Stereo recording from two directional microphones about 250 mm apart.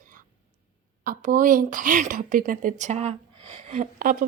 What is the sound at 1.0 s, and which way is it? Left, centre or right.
A woman's voice, right.